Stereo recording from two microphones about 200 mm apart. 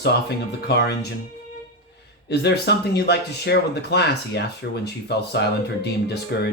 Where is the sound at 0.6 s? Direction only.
55° left (ahead or behind).